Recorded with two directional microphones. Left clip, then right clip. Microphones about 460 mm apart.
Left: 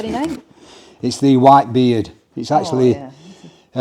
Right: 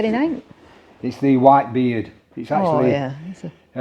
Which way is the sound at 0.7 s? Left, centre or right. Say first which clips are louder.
Left 6 dB; left.